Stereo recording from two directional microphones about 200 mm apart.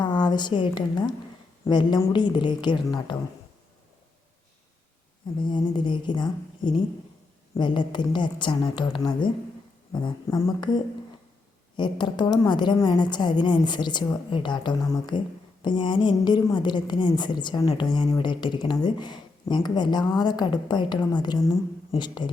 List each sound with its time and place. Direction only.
0.0 s a woman's voice: 20° left (ahead or behind)
5.4 s a woman's voice: 25° left (ahead or behind)